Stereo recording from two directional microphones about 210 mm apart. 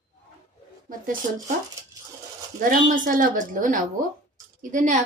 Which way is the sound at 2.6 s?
40° right (ahead or behind).